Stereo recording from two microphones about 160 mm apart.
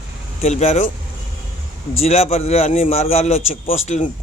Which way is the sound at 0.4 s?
45° left (ahead or behind).